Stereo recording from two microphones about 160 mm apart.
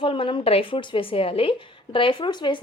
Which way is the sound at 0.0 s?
35° left (ahead or behind).